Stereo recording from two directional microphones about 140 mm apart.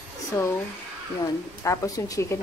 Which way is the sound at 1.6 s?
25° left (ahead or behind).